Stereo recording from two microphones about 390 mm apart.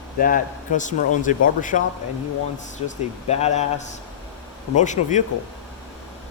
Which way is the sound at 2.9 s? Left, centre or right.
Centre.